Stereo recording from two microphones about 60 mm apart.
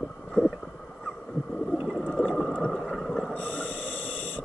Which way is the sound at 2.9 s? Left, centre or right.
Centre.